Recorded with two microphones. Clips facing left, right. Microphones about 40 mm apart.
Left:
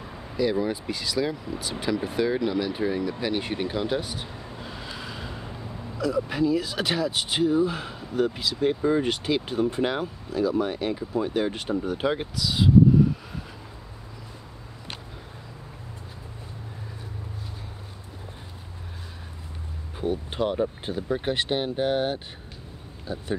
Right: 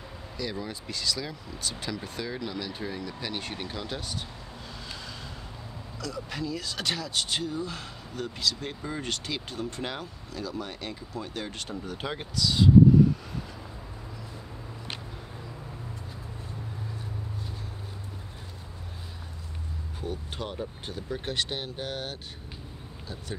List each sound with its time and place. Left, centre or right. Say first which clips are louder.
0.4 s speech: left 11 dB; centre
20.0 s vehicle: left 9 dB; left
20.8 s speech: left 7 dB; centre